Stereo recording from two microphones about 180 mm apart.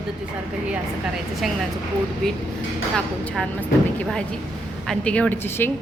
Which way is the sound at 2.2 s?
Centre (ahead or behind).